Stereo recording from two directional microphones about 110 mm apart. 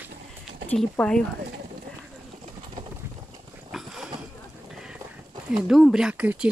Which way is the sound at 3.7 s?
5° right (ahead or behind).